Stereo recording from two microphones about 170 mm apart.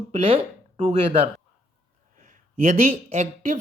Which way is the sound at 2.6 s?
45° right (ahead or behind).